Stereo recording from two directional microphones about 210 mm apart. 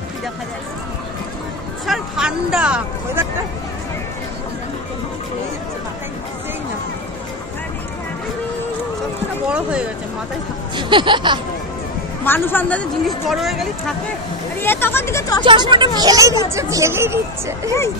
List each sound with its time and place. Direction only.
1.9 s speech: 5° right (ahead or behind)
9.5 s speech: 5° right (ahead or behind)
10.8 s speech: 20° right (ahead or behind)
12.3 s speech: 10° left (ahead or behind)
14.6 s speech: 10° left (ahead or behind)
15.4 s speech: 20° right (ahead or behind)